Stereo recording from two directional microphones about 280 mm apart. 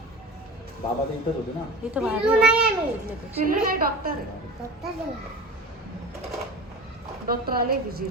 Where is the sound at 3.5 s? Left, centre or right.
Right.